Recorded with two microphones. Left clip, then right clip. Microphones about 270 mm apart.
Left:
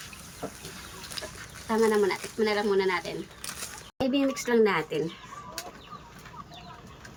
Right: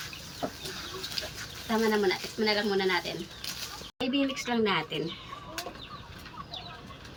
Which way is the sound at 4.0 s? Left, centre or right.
Centre.